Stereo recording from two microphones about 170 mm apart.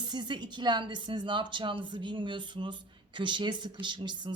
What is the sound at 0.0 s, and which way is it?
A woman's voice, 25° right (ahead or behind).